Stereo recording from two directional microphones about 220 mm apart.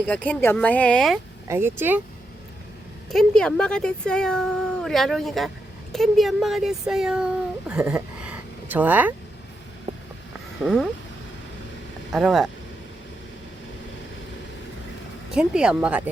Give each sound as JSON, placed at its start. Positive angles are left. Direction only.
{"t": 0.1, "sound": "speech", "side_deg": 5}
{"t": 1.5, "sound": "speech", "side_deg": -10}
{"t": 3.1, "sound": "speech", "side_deg": 0}
{"t": 7.7, "sound": "a sound", "side_deg": -5}
{"t": 10.6, "sound": "speech", "side_deg": 0}
{"t": 12.1, "sound": "speech", "side_deg": 0}
{"t": 15.3, "sound": "speech", "side_deg": -5}